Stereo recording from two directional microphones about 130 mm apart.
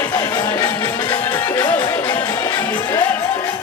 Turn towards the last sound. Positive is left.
turn(degrees=35)  # may be behind; listen again after turning